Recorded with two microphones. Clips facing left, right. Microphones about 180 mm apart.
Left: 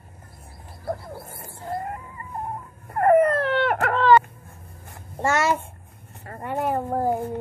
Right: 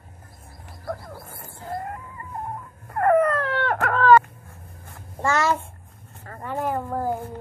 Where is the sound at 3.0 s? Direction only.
25° left (ahead or behind).